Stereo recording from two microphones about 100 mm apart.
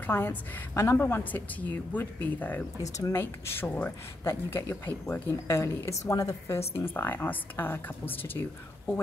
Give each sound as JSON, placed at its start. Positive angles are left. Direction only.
{"t": 0.0, "sound": "a woman's voice", "side_deg": 20}
{"t": 2.8, "sound": "speech", "side_deg": 35}
{"t": 3.2, "sound": "a woman's voice", "side_deg": 20}